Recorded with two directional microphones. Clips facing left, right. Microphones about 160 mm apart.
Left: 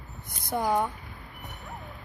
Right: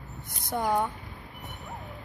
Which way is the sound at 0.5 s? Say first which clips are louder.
Left 1 dB; 5° left (ahead or behind).